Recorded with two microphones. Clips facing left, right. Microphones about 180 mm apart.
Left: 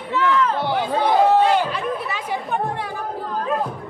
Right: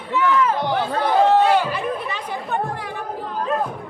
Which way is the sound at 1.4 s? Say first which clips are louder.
Even; centre (ahead or behind).